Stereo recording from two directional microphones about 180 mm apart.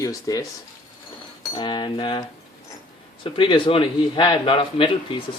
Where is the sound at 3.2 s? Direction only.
30° left (ahead or behind).